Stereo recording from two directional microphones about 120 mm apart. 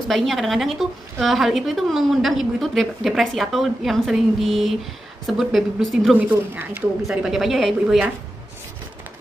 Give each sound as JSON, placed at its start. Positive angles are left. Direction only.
{"t": 0.1, "sound": "a woman's voice", "side_deg": 0}
{"t": 6.1, "sound": "a woman's voice", "side_deg": -15}
{"t": 7.1, "sound": "a woman's voice", "side_deg": 0}